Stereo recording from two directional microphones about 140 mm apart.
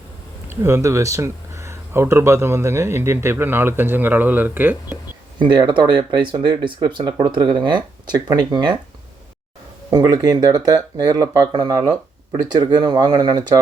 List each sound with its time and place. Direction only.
0.4 s speech: 15° right (ahead or behind)
5.4 s speech: 30° right (ahead or behind)
9.9 s speech: 25° right (ahead or behind)